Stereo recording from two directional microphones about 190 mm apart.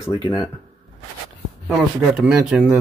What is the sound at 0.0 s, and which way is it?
Speech, 20° left (ahead or behind).